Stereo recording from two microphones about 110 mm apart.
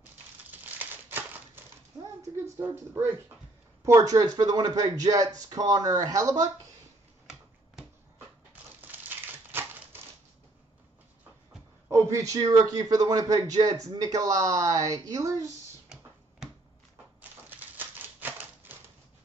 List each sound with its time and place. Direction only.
0.5 s crumpling: 15° right (ahead or behind)
2.6 s a man's voice: 20° right (ahead or behind)
11.9 s a man's voice: 30° right (ahead or behind)
17.5 s typewriter: 15° right (ahead or behind)